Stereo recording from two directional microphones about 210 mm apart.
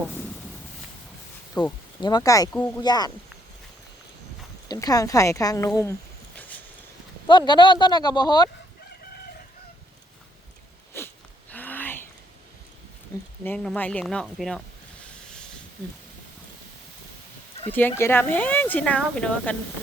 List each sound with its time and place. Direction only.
0.1 s a sound: 5° left (ahead or behind)
1.6 s speech: 15° left (ahead or behind)
2.8 s speech: 20° left (ahead or behind)
4.7 s speech: 15° left (ahead or behind)
7.3 s speech: 20° left (ahead or behind)
10.9 s sneeze: 10° left (ahead or behind)
13.4 s speech: 5° left (ahead or behind)
17.7 s speech: 10° left (ahead or behind)